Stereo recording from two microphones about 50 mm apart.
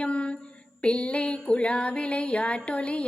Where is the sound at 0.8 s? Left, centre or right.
Left.